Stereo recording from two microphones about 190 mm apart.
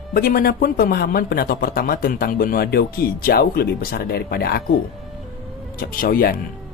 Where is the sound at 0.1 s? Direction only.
50° left (ahead or behind).